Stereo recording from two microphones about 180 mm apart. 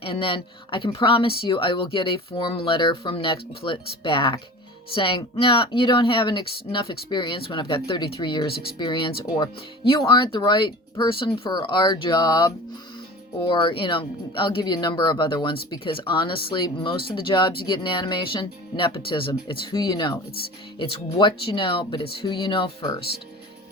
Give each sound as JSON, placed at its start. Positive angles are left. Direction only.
{"t": 0.0, "sound": "speech", "side_deg": 30}